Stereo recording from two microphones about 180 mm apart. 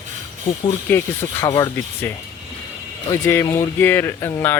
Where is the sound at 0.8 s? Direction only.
15° left (ahead or behind).